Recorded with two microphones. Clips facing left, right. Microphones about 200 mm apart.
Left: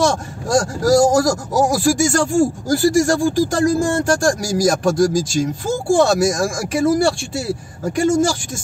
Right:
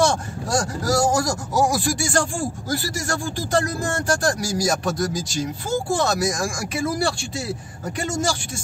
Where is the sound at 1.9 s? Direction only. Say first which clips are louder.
Left 8 dB; 45° left (ahead or behind).